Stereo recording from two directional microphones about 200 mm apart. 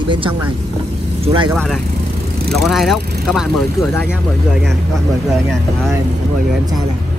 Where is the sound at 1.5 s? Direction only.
Centre (ahead or behind).